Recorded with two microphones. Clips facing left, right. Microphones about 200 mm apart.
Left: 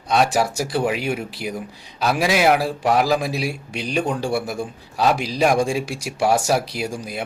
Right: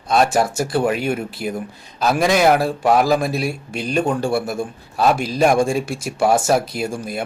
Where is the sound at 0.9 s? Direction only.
50° right (ahead or behind).